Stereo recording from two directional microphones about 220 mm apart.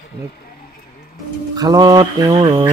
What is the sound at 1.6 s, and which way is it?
A man's voice, 15° right (ahead or behind).